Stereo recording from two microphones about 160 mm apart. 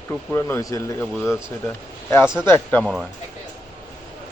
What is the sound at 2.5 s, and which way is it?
Speech, 10° left (ahead or behind).